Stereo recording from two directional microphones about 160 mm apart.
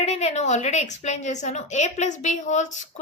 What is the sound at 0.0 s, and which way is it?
Child singing, 40° left (ahead or behind).